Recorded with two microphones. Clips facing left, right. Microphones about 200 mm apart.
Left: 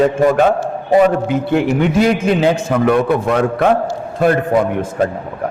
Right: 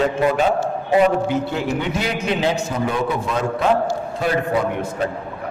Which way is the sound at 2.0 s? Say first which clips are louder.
Left 7 dB; 50° left (ahead or behind).